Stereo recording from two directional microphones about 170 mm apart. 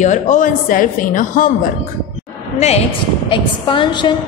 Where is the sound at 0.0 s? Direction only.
45° left (ahead or behind).